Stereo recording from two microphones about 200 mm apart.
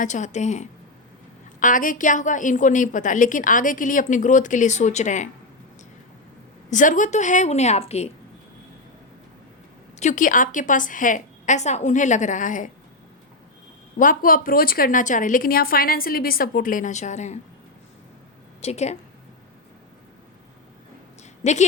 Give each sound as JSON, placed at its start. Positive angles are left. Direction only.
{"t": 0.0, "sound": "a woman's voice", "side_deg": 35}
{"t": 6.7, "sound": "a woman's voice", "side_deg": 40}
{"t": 10.0, "sound": "a woman's voice", "side_deg": 40}
{"t": 14.0, "sound": "speech", "side_deg": 45}
{"t": 18.6, "sound": "a woman's voice", "side_deg": 35}
{"t": 21.4, "sound": "a woman's voice", "side_deg": 35}